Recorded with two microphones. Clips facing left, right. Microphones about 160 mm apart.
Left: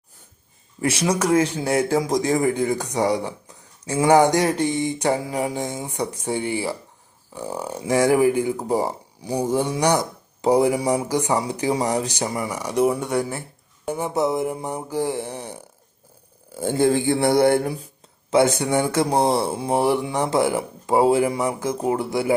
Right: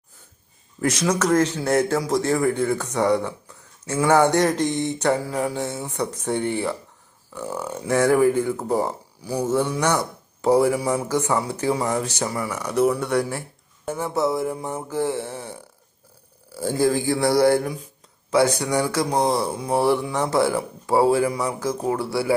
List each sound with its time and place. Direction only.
0.8 s speech: 10° left (ahead or behind)
12.5 s speech: 10° left (ahead or behind)